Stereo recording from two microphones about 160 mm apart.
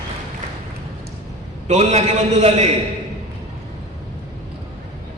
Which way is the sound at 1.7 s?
45° right (ahead or behind).